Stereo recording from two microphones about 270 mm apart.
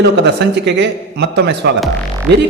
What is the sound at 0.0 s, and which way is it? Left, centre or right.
A man's voice, right.